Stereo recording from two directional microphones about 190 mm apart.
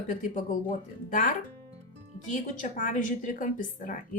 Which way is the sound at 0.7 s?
45° left (ahead or behind).